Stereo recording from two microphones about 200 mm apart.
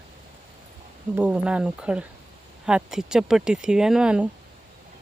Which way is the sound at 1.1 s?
5° right (ahead or behind).